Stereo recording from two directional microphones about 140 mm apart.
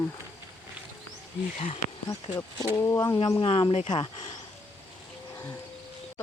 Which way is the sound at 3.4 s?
45° left (ahead or behind).